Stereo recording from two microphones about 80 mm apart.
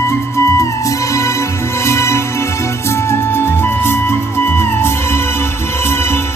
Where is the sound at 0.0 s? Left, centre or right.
Left.